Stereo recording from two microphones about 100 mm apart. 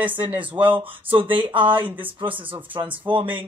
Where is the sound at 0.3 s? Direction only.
15° right (ahead or behind).